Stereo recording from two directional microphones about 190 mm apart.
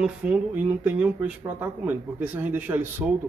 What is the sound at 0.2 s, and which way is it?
A man's voice, centre (ahead or behind).